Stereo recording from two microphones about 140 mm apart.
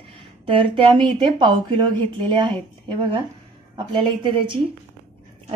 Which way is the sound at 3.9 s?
35° right (ahead or behind).